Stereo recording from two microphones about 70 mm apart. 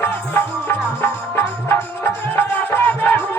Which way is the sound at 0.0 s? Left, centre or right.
Left.